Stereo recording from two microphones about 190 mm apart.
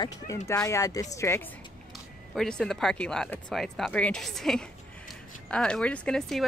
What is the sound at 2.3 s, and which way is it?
Speech, 5° left (ahead or behind).